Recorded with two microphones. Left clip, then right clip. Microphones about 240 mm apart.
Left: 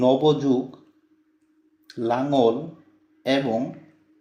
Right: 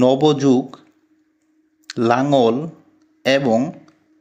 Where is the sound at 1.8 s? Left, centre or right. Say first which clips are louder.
Right 7 dB; right.